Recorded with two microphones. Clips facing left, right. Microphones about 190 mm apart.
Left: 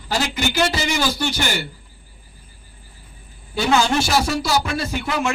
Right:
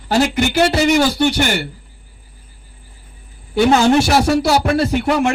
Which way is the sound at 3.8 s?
60° right (ahead or behind).